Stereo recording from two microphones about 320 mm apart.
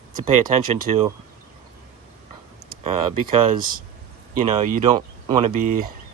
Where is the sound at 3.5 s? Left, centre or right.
Right.